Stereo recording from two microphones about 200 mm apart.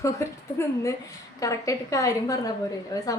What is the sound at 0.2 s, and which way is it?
Speech, 15° left (ahead or behind).